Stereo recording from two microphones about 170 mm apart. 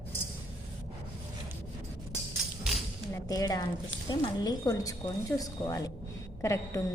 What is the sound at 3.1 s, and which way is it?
A woman's voice, 20° left (ahead or behind).